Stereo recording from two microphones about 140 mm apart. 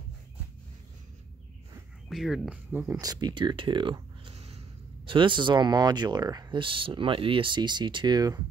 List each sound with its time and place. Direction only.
2.0 s speech: centre (ahead or behind)
2.9 s speech: 25° right (ahead or behind)